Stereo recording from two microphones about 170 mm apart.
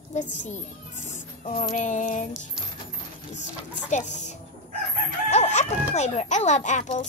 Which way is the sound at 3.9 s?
45° left (ahead or behind).